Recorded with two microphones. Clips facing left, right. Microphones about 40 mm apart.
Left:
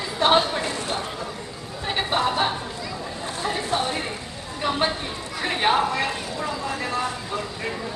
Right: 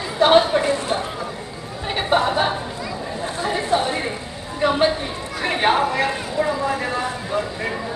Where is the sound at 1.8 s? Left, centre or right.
Centre.